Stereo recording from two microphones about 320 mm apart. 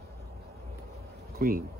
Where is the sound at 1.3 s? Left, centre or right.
Right.